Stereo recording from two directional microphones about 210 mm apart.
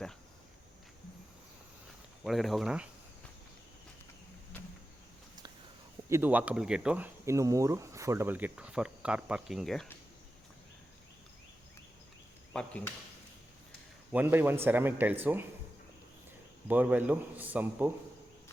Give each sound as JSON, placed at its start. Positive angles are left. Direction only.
{"t": 2.2, "sound": "speech", "side_deg": 0}
{"t": 6.1, "sound": "speech", "side_deg": -10}
{"t": 14.1, "sound": "speech", "side_deg": -10}
{"t": 16.6, "sound": "speech", "side_deg": -10}